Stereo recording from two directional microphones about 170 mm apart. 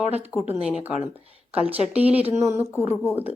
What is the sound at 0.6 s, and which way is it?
A woman's voice, 5° right (ahead or behind).